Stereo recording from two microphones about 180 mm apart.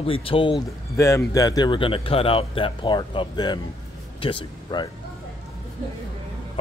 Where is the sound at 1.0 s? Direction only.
15° left (ahead or behind).